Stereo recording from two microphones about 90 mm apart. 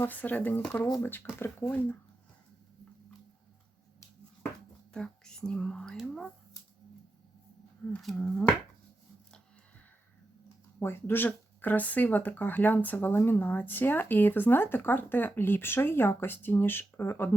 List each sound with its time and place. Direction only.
0.0 s speech: 20° left (ahead or behind)
4.9 s speech: 10° left (ahead or behind)
8.0 s speech: 10° left (ahead or behind)
10.8 s speech: 25° left (ahead or behind)